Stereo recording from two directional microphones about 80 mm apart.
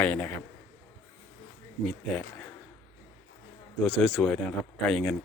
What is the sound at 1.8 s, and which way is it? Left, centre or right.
Speech, centre.